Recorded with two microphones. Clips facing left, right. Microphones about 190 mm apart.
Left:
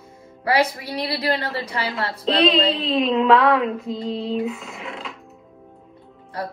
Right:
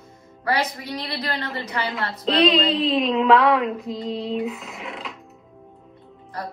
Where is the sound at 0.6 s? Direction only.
30° left (ahead or behind).